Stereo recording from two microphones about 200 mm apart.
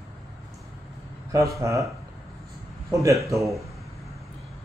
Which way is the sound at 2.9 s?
15° right (ahead or behind).